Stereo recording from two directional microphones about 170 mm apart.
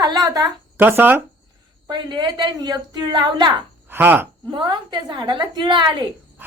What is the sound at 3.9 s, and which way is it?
Speech, 10° right (ahead or behind).